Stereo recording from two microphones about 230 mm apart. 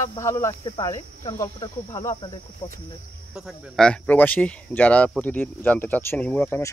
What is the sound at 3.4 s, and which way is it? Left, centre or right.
Speech, centre.